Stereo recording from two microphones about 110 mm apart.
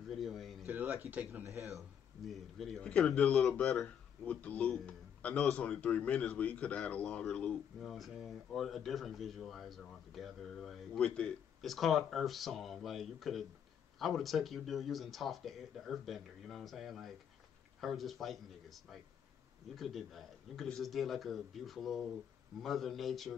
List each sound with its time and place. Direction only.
0.1 s speech: centre (ahead or behind)
0.7 s speech: 20° right (ahead or behind)
2.2 s a man's voice: centre (ahead or behind)